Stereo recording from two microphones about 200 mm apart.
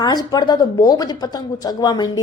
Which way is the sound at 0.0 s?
20° left (ahead or behind).